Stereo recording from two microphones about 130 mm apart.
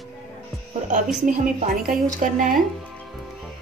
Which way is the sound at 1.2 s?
90° right.